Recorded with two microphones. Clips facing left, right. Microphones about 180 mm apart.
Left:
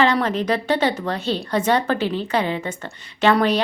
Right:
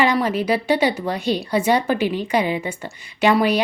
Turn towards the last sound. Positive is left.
turn(degrees=-10)  # may be behind; listen again after turning